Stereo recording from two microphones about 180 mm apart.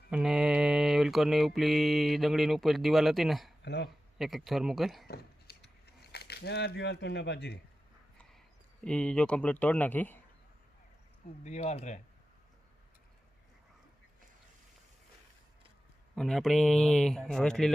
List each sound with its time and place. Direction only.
0.1 s mantra: 5° right (ahead or behind)
3.6 s speech: 70° left (ahead or behind)
4.2 s speech: centre (ahead or behind)
5.0 s a sound: 60° left (ahead or behind)
8.8 s speech: 5° left (ahead or behind)
11.4 s speech: 40° left (ahead or behind)
16.1 s speech: centre (ahead or behind)